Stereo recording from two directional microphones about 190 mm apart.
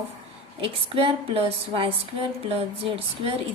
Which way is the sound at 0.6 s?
30° right (ahead or behind).